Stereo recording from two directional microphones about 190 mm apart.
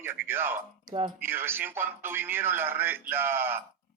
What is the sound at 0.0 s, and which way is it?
Speech, 10° right (ahead or behind).